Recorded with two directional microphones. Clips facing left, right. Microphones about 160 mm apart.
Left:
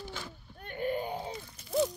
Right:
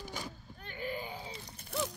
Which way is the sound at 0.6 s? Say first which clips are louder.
Left 7 dB; 50° left (ahead or behind).